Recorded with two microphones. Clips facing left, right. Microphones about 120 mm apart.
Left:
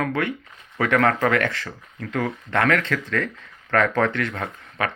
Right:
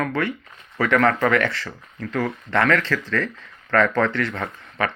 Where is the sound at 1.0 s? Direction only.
50° left (ahead or behind).